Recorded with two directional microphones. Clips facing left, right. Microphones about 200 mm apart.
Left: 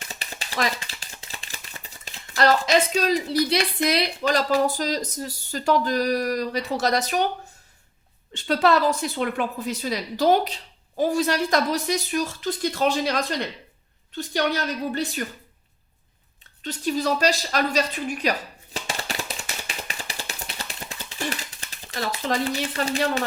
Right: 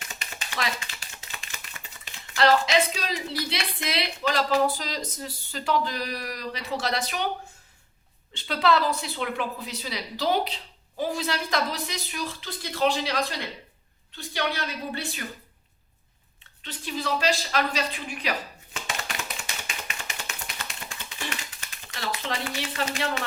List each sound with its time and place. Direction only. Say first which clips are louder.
0.0 s typewriter: left 3 dB; 35° left (ahead or behind)
5.5 s a woman's voice: left 5 dB; 45° left (ahead or behind)
8.3 s a woman's voice: left 3 dB; 45° left (ahead or behind)
14.2 s a woman's voice: left 5 dB; 45° left (ahead or behind)
16.6 s a sound: left 7 dB; 40° left (ahead or behind)